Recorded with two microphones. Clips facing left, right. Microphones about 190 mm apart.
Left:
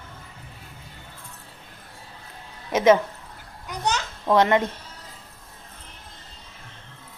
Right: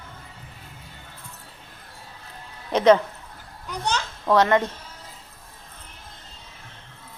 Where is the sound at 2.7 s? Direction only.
10° left (ahead or behind).